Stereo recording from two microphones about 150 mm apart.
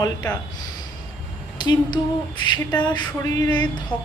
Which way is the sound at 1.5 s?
30° left (ahead or behind).